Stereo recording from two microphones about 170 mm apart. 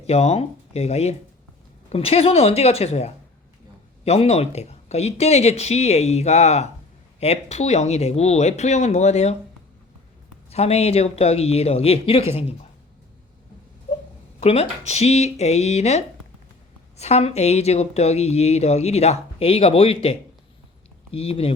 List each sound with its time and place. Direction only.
0.1 s speech: 40° left (ahead or behind)
10.5 s speech: 35° left (ahead or behind)
13.9 s a sound: 45° left (ahead or behind)
14.4 s speech: 40° left (ahead or behind)